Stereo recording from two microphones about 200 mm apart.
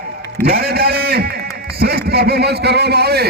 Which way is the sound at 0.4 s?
50° right (ahead or behind).